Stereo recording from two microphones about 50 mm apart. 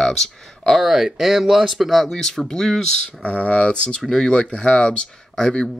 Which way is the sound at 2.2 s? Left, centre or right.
Centre.